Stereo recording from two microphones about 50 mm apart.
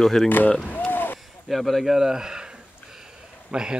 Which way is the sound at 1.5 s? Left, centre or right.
Centre.